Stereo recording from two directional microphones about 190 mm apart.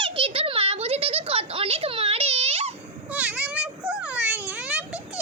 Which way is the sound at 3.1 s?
5° right (ahead or behind).